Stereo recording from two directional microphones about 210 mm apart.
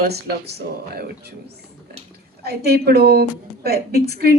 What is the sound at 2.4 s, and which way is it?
Speech, 50° right (ahead or behind).